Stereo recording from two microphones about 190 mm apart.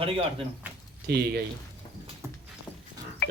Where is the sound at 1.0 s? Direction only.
55° right (ahead or behind).